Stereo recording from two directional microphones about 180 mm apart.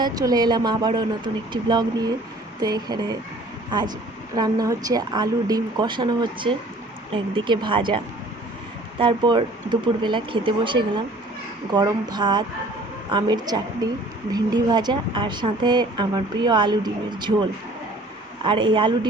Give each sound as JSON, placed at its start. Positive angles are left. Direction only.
{"t": 0.0, "sound": "a woman's voice", "side_deg": -20}